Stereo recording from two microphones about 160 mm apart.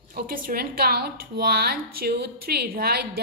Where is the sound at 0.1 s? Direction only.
60° right (ahead or behind).